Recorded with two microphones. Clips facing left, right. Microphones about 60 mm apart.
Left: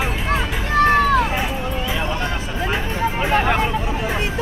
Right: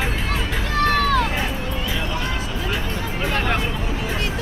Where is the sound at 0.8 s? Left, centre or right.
Left.